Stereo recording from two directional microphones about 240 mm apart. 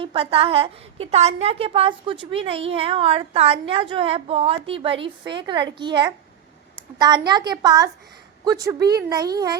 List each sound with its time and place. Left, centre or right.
0.0 s a woman's voice: right